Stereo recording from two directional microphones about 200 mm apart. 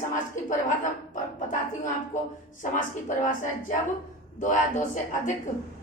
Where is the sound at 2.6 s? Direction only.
40° left (ahead or behind).